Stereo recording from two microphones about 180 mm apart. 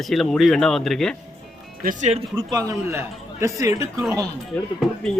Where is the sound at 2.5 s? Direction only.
15° right (ahead or behind).